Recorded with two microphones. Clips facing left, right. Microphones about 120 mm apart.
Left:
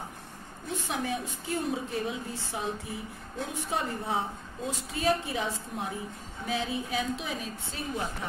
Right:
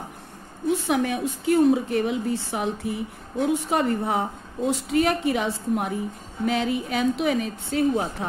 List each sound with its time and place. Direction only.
0.8 s a woman's voice: 70° right (ahead or behind)